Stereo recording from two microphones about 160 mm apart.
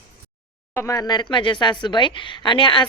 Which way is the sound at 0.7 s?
20° left (ahead or behind).